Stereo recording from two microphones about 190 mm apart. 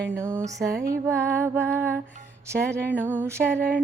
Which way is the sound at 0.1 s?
15° right (ahead or behind).